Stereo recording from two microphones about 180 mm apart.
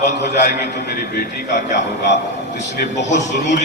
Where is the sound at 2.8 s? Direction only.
45° left (ahead or behind).